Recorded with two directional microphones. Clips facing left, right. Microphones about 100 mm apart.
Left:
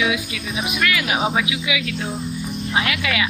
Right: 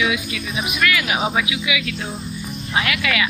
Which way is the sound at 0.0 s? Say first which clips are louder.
Even; 25° left (ahead or behind).